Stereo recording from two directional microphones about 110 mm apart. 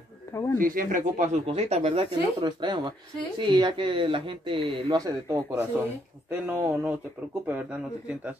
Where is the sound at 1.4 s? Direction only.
70° right (ahead or behind).